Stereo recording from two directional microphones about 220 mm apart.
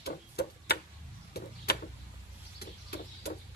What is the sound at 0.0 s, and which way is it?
Tick-tock, 45° left (ahead or behind).